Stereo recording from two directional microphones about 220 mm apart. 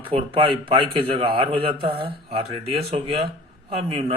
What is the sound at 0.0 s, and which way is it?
A man's voice, 25° right (ahead or behind).